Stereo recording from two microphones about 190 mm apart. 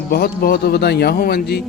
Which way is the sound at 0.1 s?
55° left (ahead or behind).